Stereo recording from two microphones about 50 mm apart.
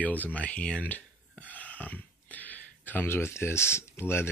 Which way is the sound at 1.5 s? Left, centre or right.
Left.